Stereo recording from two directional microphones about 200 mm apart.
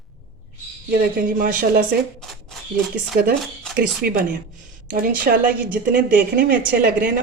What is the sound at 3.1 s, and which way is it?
Speech, 45° right (ahead or behind).